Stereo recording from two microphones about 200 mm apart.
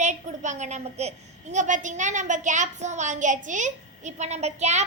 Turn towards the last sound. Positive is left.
turn(degrees=-35)  # may be behind; listen again after turning